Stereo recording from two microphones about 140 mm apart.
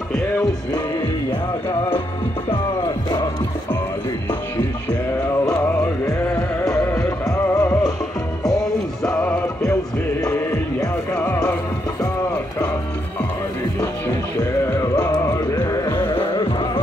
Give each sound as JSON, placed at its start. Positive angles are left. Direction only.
{"t": 2.5, "sound": "music", "side_deg": 30}
{"t": 5.6, "sound": "music", "side_deg": 20}
{"t": 9.0, "sound": "music", "side_deg": 5}
{"t": 10.2, "sound": "music", "side_deg": 20}
{"t": 14.7, "sound": "music", "side_deg": 20}